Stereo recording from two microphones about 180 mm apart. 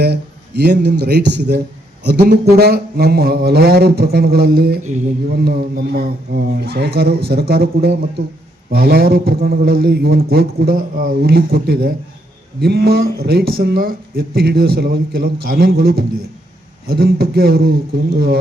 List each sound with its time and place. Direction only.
0.0 s a man's voice: 65° right (ahead or behind)